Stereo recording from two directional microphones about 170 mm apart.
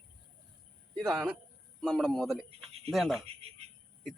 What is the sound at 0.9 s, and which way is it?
Speech, centre (ahead or behind).